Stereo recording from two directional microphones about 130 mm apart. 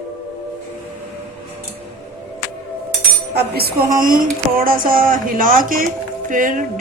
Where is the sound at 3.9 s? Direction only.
90° right.